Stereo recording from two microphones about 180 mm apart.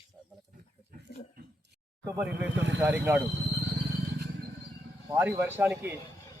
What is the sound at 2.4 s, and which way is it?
Speech, 90° right.